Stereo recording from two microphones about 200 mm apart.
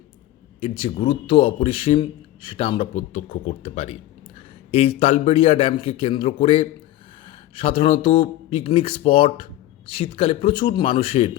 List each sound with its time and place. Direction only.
0.6 s speech: 30° left (ahead or behind)